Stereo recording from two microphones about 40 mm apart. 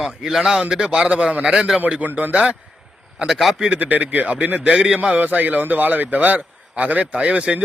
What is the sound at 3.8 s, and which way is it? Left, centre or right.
Speech, right.